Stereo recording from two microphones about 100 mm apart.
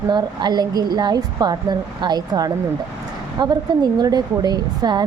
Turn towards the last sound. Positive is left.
turn(degrees=-45)  # may be behind; listen again after turning